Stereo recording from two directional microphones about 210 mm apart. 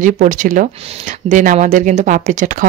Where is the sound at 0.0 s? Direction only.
40° right (ahead or behind).